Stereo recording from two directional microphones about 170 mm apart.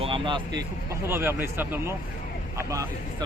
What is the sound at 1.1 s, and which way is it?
Speech, 15° right (ahead or behind).